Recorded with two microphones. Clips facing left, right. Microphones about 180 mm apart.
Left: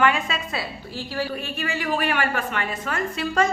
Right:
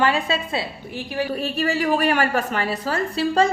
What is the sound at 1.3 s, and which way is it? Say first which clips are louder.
A woman's voice: right 6 dB; 40° right (ahead or behind).